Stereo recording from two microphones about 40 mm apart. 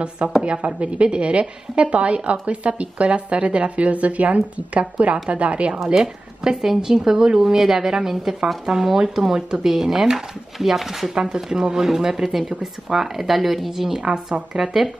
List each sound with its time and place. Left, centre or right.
0.4 s a woman's voice: right
5.9 s speech: centre
11.1 s speech: centre